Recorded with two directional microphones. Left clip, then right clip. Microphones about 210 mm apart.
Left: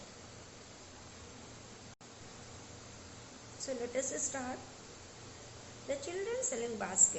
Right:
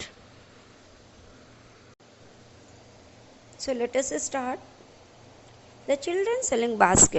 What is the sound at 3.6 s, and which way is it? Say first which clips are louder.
Speech: right 11 dB; 40° right (ahead or behind).